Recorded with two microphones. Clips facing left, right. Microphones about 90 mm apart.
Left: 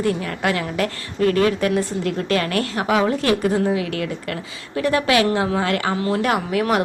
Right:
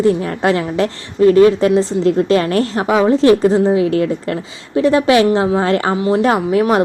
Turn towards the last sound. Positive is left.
turn(degrees=-25)  # may be behind; listen again after turning